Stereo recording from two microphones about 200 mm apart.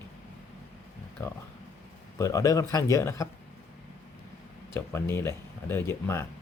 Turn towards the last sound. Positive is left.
turn(degrees=10)  # may be behind; listen again after turning